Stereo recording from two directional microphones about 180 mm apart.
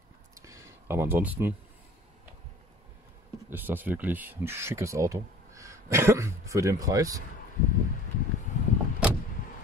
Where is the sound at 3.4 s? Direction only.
10° right (ahead or behind).